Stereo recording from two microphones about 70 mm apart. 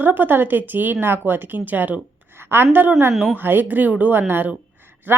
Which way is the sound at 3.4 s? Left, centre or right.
Right.